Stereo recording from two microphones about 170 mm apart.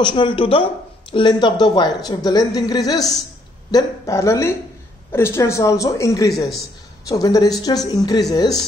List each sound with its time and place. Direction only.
0.0 s a woman's voice: 30° left (ahead or behind)